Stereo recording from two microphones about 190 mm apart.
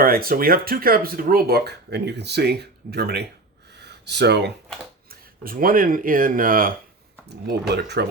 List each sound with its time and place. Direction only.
0.0 s speech: 50° right (ahead or behind)
3.8 s a sound: 60° right (ahead or behind)
5.4 s speech: 50° right (ahead or behind)
7.3 s speech: 60° right (ahead or behind)